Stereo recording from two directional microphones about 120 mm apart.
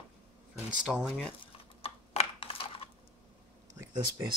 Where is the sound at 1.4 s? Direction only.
55° left (ahead or behind).